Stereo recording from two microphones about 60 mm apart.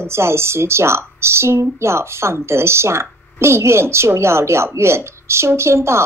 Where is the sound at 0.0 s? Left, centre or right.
Right.